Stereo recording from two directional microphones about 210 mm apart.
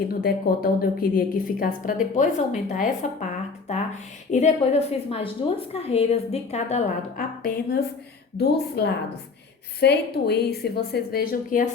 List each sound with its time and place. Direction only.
0.1 s a woman's voice: 45° left (ahead or behind)
3.7 s a sound: 30° left (ahead or behind)
4.3 s a woman's voice: 35° left (ahead or behind)
8.4 s a woman's voice: 50° left (ahead or behind)